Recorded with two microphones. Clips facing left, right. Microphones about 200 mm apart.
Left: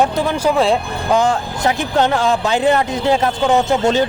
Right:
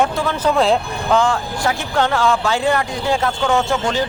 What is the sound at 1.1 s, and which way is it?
Speech, 20° left (ahead or behind).